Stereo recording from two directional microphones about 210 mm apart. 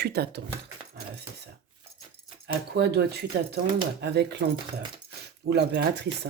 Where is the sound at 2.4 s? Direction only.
50° right (ahead or behind).